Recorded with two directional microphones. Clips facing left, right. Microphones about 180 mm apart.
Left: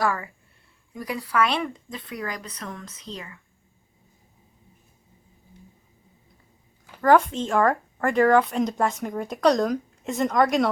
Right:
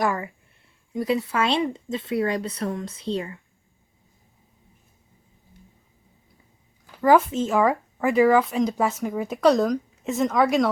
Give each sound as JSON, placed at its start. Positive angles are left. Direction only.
{"t": 0.0, "sound": "speech", "side_deg": -20}
{"t": 7.0, "sound": "speech", "side_deg": -5}